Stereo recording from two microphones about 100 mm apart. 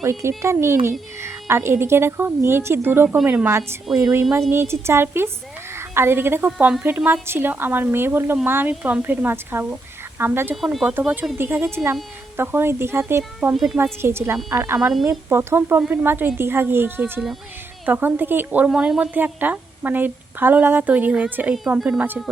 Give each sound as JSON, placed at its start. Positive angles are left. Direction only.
{"t": 0.0, "sound": "a woman's voice", "side_deg": -25}
{"t": 10.5, "sound": "speech", "side_deg": -5}
{"t": 11.3, "sound": "a woman's voice", "side_deg": -25}
{"t": 13.5, "sound": "speech", "side_deg": -5}
{"t": 14.0, "sound": "a woman's voice", "side_deg": -25}